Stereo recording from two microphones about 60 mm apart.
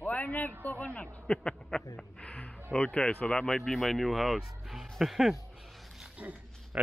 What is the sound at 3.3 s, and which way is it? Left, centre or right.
Speech, centre.